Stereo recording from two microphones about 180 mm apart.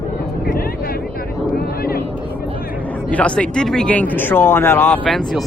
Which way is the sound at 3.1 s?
5° left (ahead or behind).